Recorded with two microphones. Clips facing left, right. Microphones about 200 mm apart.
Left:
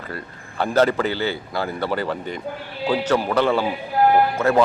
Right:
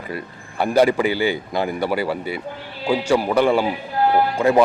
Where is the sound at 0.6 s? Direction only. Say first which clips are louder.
Right 2 dB; 10° right (ahead or behind).